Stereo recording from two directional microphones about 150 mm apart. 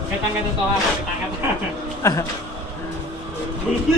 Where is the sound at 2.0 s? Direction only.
20° left (ahead or behind).